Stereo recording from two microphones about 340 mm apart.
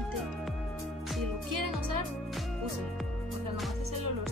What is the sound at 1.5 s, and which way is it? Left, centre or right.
Music, right.